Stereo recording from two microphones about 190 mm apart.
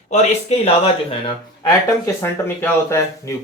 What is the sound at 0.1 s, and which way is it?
Speech, 35° left (ahead or behind).